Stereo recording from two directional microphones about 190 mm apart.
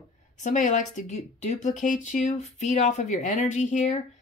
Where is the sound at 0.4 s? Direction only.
40° left (ahead or behind).